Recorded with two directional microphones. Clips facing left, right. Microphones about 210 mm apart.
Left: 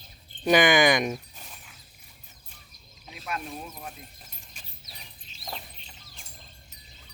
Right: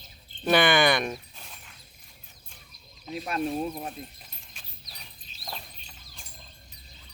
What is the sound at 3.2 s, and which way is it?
Speech, 30° right (ahead or behind).